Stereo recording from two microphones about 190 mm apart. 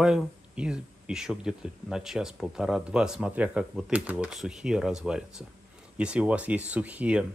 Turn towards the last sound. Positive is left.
turn(degrees=-5)  # may be behind; listen again after turning